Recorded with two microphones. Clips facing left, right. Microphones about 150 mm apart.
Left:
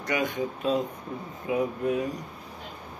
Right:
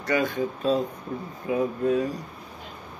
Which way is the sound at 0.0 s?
20° left (ahead or behind).